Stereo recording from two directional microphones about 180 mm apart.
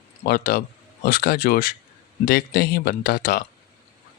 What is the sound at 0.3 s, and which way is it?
Speech, 55° left (ahead or behind).